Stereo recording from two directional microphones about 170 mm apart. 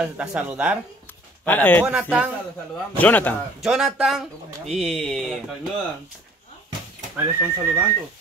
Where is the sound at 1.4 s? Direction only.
10° left (ahead or behind).